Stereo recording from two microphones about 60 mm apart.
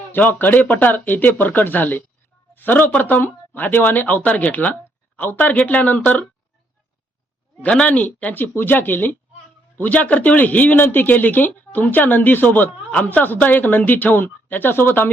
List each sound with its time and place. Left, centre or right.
0.1 s speech: left
7.6 s speech: left